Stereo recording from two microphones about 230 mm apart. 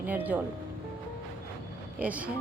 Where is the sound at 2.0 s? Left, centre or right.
Centre.